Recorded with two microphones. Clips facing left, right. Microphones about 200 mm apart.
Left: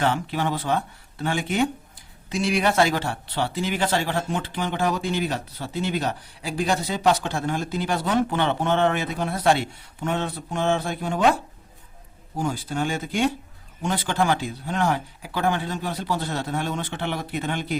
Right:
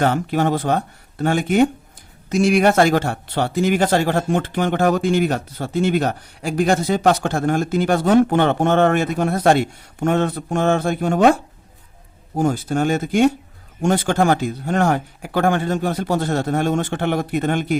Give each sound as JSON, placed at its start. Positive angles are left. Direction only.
{"t": 0.0, "sound": "speech", "side_deg": -45}
{"t": 12.4, "sound": "speech", "side_deg": -45}